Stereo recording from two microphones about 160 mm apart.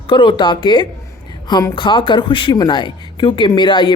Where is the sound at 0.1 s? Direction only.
30° left (ahead or behind).